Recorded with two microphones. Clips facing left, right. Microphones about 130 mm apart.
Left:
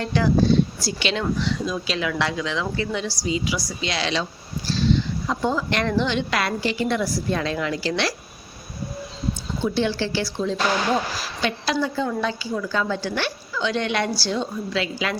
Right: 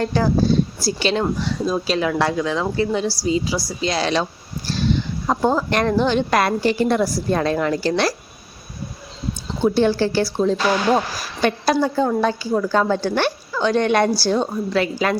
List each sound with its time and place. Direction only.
0.0 s a woman's voice: 40° right (ahead or behind)
9.6 s speech: 45° right (ahead or behind)